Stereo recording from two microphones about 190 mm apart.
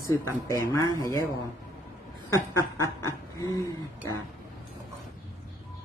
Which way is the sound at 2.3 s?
15° left (ahead or behind).